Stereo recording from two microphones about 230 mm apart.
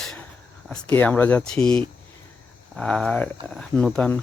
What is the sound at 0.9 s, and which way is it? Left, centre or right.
Speech, centre.